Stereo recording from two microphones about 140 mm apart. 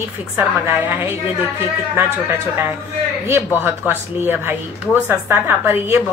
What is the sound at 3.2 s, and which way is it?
A woman's voice, 15° right (ahead or behind).